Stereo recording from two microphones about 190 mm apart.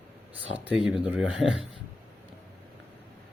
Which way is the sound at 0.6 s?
5° right (ahead or behind).